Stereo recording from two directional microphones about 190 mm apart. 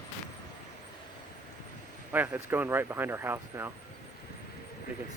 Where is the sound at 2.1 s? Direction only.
10° right (ahead or behind).